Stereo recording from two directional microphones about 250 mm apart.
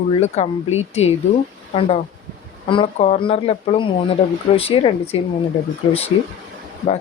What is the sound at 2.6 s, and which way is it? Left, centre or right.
Speech, left.